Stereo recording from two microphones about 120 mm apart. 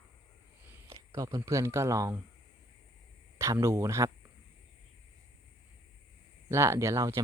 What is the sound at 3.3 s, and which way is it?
Speech, 25° right (ahead or behind).